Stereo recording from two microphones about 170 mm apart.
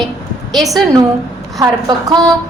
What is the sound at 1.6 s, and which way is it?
Speech, 25° right (ahead or behind).